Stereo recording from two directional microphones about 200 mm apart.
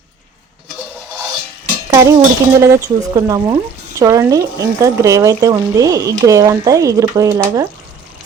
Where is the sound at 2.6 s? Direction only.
15° right (ahead or behind).